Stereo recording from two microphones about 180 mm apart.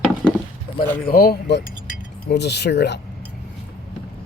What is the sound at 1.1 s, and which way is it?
Speech, 60° left (ahead or behind).